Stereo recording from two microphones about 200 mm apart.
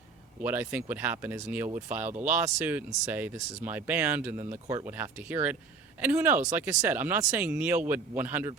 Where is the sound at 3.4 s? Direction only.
35° right (ahead or behind).